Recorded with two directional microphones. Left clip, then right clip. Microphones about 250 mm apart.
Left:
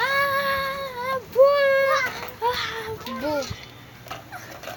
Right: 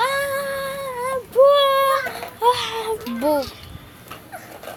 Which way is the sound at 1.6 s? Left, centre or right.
Right.